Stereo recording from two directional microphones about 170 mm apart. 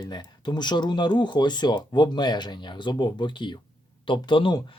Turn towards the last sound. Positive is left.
turn(degrees=30)  # may be behind; listen again after turning